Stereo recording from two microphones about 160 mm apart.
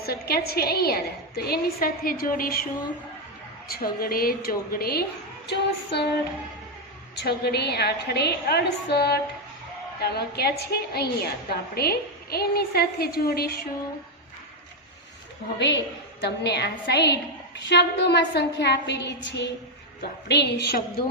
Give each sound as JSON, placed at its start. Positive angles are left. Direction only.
{"t": 0.0, "sound": "a woman's voice", "side_deg": 75}
{"t": 3.7, "sound": "a woman's voice", "side_deg": 70}
{"t": 5.5, "sound": "a woman's voice", "side_deg": 90}
{"t": 7.2, "sound": "a woman's voice", "side_deg": 90}
{"t": 15.5, "sound": "a woman's voice", "side_deg": 90}